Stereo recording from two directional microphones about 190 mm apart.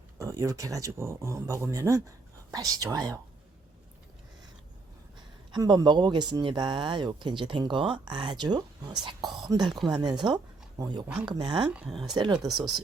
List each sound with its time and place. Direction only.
0.2 s speech: 15° right (ahead or behind)
5.5 s speech: 20° right (ahead or behind)
11.7 s speech: 5° right (ahead or behind)
12.1 s speech: 20° right (ahead or behind)
12.5 s speech: centre (ahead or behind)